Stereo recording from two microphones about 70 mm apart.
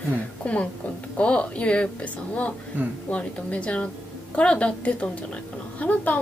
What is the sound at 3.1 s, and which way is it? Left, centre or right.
A woman's voice, centre.